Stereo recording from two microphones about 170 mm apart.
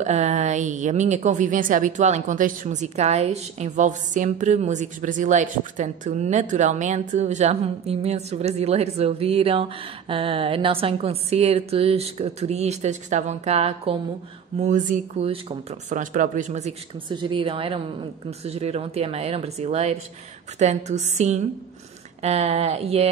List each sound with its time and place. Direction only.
0.0 s a woman's voice: 40° right (ahead or behind)
17.1 s a woman's voice: 30° right (ahead or behind)